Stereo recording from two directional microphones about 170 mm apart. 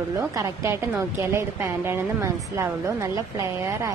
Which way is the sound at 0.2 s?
20° right (ahead or behind).